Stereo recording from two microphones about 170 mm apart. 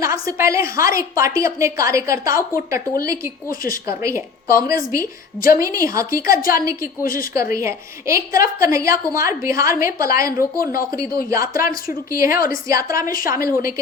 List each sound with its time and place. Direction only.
0.0 s a woman's voice: 15° right (ahead or behind)
5.5 s speech: 20° right (ahead or behind)
7.0 s a woman's voice: 55° left (ahead or behind)
7.3 s a woman's voice: 15° right (ahead or behind)
13.1 s a woman's voice: 55° left (ahead or behind)